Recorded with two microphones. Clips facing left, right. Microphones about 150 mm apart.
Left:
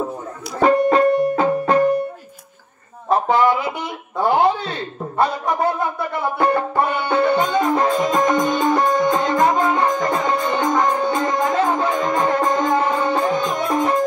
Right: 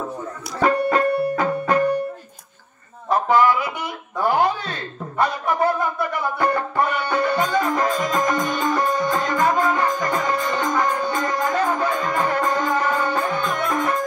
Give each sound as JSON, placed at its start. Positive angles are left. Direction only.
{"t": 0.6, "sound": "music", "side_deg": 25}
{"t": 3.1, "sound": "a sound", "side_deg": 25}
{"t": 6.3, "sound": "music", "side_deg": 25}